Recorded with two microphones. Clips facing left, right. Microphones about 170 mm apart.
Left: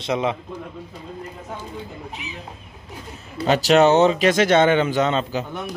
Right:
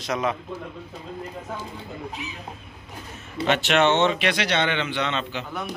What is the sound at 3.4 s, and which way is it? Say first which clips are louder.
A man's voice: left 5 dB; 35° left (ahead or behind).